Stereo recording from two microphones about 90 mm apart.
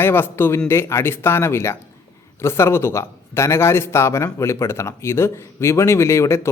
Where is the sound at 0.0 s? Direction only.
25° left (ahead or behind).